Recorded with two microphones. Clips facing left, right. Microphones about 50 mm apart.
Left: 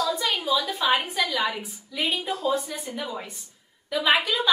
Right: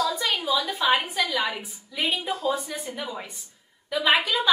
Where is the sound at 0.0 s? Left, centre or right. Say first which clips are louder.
Even; centre.